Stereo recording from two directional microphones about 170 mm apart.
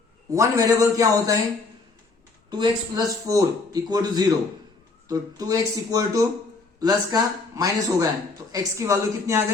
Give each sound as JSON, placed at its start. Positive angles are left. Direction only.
{"t": 0.3, "sound": "a man's voice", "side_deg": -20}
{"t": 2.5, "sound": "a man's voice", "side_deg": -25}